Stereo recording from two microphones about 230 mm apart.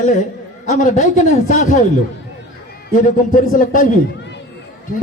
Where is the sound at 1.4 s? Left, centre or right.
Left.